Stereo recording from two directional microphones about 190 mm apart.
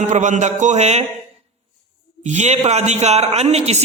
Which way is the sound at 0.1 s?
40° right (ahead or behind).